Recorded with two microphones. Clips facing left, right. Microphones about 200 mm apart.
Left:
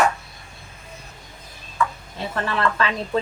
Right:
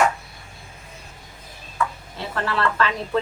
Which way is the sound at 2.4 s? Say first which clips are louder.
Even; 15° left (ahead or behind).